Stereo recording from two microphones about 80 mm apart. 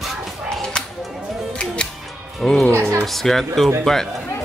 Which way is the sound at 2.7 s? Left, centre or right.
Right.